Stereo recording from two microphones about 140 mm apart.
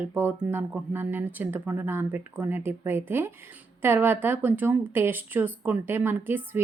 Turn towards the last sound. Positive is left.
turn(degrees=-15)  # may be behind; listen again after turning